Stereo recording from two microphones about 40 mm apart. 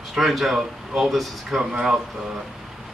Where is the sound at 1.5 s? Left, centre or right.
Centre.